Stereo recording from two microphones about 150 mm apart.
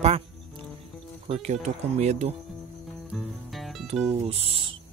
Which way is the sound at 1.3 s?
50° right (ahead or behind).